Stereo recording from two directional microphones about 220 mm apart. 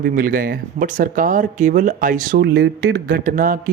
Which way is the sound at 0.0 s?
40° right (ahead or behind).